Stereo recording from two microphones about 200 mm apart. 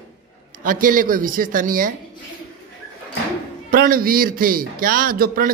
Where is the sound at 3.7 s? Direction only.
45° right (ahead or behind).